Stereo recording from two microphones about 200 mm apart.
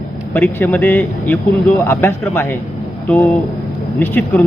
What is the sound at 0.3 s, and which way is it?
A man's voice, 10° left (ahead or behind).